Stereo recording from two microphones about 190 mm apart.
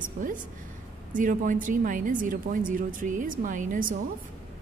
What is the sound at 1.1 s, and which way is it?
A woman's voice, 45° right (ahead or behind).